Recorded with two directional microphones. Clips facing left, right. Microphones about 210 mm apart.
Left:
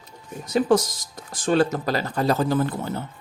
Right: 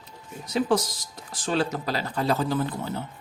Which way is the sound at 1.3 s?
50° left (ahead or behind).